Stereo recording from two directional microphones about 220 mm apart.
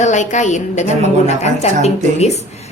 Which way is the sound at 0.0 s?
35° left (ahead or behind).